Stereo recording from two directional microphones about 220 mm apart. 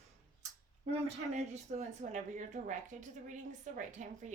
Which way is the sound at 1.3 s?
30° right (ahead or behind).